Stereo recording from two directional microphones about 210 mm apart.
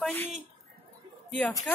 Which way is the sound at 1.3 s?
5° left (ahead or behind).